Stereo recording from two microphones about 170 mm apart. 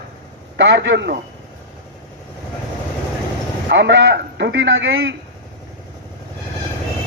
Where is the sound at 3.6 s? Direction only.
90° right.